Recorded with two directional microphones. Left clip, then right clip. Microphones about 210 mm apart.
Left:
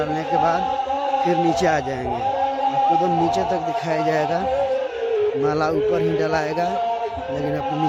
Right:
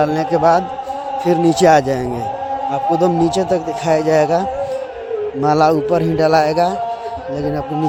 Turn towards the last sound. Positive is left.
turn(degrees=-35)  # may be behind; listen again after turning